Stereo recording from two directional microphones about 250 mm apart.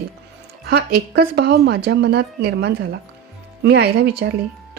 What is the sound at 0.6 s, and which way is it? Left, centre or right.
Speech, right.